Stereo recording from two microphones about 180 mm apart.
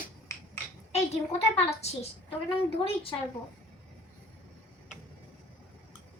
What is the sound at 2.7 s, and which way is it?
Speech, 30° left (ahead or behind).